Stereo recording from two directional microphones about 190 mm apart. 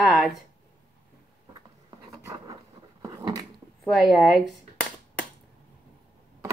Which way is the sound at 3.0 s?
20° right (ahead or behind).